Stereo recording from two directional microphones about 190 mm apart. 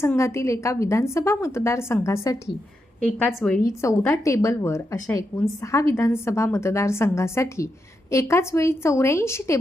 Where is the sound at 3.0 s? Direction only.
5° left (ahead or behind).